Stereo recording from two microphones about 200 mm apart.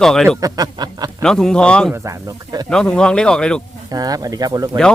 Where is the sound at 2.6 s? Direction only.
5° left (ahead or behind).